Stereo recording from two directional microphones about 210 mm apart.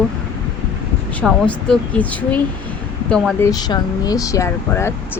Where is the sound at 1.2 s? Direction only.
5° left (ahead or behind).